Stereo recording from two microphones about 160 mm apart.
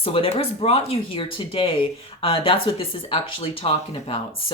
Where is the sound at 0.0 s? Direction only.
35° left (ahead or behind).